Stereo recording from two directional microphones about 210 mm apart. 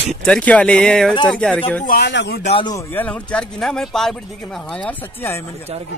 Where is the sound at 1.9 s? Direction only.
55° left (ahead or behind).